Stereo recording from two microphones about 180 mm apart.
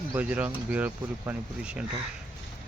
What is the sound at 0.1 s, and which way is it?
Speech, 10° right (ahead or behind).